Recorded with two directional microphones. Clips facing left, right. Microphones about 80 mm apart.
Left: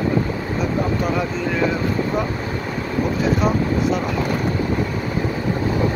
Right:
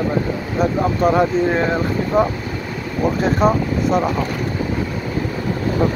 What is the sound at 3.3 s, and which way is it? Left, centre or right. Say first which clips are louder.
Speech: right 3 dB; right.